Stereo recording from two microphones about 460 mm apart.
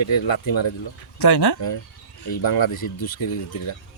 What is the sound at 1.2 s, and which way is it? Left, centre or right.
Speech, left.